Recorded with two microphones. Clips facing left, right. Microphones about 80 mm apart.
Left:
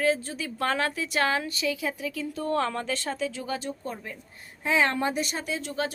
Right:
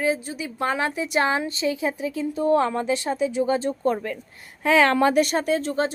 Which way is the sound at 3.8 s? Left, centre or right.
Right.